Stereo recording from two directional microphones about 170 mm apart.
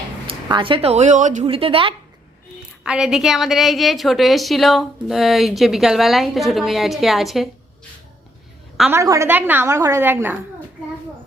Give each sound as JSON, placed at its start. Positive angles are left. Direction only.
{"t": 0.4, "sound": "a woman's voice", "side_deg": -30}
{"t": 1.5, "sound": "a woman's voice", "side_deg": -30}
{"t": 2.8, "sound": "a woman's voice", "side_deg": -5}
{"t": 8.9, "sound": "a woman's voice", "side_deg": -15}